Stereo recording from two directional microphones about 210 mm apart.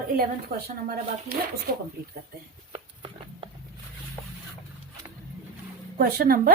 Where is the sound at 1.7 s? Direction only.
45° right (ahead or behind).